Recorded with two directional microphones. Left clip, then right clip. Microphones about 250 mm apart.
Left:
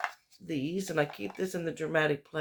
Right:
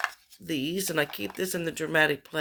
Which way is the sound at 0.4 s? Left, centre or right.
Right.